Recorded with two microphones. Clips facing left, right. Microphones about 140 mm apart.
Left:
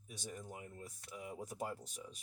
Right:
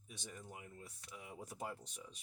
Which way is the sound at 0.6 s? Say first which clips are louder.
Left 3 dB; 30° left (ahead or behind).